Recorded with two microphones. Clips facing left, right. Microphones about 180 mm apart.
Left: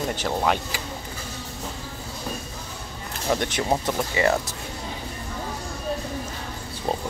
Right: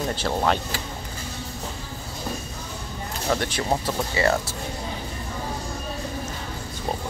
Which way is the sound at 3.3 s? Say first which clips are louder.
Left 1 dB; 20° left (ahead or behind).